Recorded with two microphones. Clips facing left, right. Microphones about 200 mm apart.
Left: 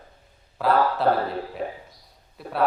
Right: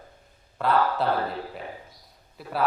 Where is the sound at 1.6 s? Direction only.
45° left (ahead or behind).